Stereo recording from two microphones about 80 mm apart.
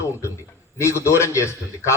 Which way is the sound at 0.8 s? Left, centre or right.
Left.